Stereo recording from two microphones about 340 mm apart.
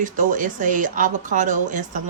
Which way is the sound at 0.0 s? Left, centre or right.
Right.